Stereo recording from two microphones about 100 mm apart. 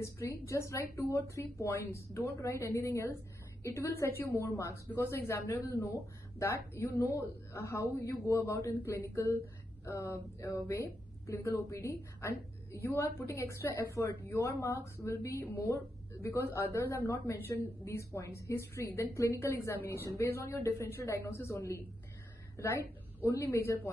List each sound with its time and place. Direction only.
0.0 s a woman's voice: 30° left (ahead or behind)
15.0 s a woman's voice: 20° left (ahead or behind)
23.2 s a woman's voice: 30° left (ahead or behind)